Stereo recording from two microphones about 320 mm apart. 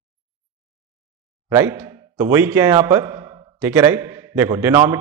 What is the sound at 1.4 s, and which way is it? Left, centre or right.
Speech, centre.